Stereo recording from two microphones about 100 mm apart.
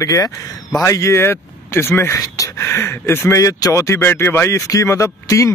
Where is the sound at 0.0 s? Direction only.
40° left (ahead or behind).